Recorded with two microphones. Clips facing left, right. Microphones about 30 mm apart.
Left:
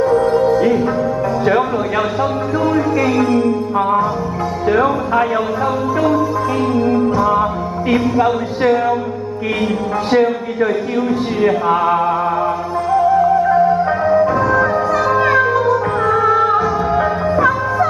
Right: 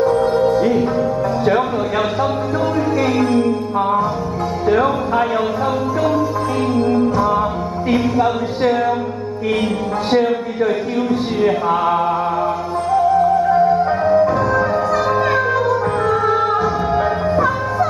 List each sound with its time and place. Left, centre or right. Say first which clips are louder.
0.1 s music: left 2 dB; centre
0.5 s music: left 2 dB; centre
3.0 s music: right 1 dB; centre
4.7 s music: left 2 dB; centre
6.7 s music: even; centre
11.0 s a sound: left 2 dB; centre
12.9 s music: left 1 dB; centre